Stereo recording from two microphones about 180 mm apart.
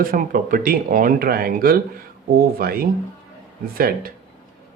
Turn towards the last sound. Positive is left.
turn(degrees=-55)  # may be behind; listen again after turning